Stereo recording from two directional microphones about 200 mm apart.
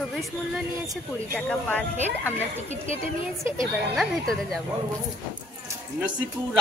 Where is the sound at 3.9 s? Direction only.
Centre (ahead or behind).